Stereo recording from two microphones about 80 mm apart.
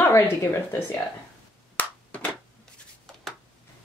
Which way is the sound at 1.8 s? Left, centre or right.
Centre.